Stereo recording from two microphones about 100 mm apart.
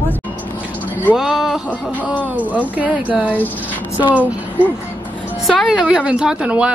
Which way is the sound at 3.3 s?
15° left (ahead or behind).